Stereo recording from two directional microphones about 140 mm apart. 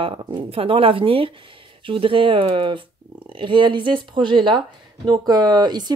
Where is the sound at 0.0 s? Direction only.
40° right (ahead or behind).